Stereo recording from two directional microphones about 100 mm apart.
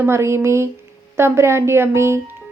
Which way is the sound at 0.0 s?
25° right (ahead or behind).